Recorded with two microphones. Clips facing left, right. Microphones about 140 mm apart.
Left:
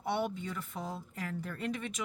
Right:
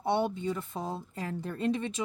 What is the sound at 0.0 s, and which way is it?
Speech, 25° right (ahead or behind).